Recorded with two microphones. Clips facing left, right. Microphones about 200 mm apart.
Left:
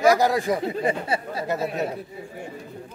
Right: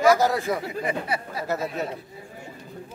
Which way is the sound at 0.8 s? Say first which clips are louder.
Left 3 dB; 30° left (ahead or behind).